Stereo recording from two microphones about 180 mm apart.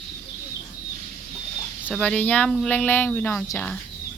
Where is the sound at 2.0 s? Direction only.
10° left (ahead or behind).